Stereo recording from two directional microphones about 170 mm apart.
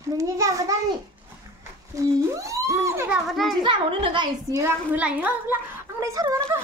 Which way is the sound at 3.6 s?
30° right (ahead or behind).